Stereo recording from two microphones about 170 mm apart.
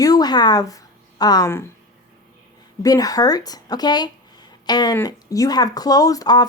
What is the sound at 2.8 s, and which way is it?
Speech, 20° left (ahead or behind).